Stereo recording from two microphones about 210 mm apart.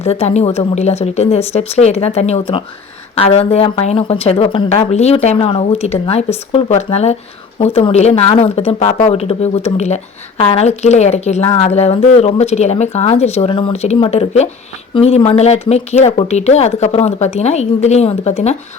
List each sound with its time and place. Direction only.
0.0 s speech: 30° left (ahead or behind)